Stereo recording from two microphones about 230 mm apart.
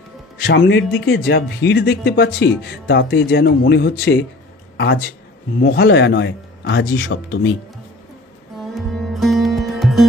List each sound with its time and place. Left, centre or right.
0.5 s speech: left
8.5 s music: centre